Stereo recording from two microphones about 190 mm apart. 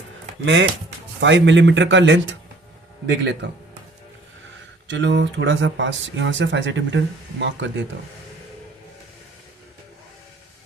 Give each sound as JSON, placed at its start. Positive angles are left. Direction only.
{"t": 0.4, "sound": "speech", "side_deg": -70}
{"t": 4.9, "sound": "speech", "side_deg": -70}